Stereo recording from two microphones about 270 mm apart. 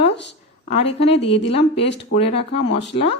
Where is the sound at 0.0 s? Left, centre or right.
Left.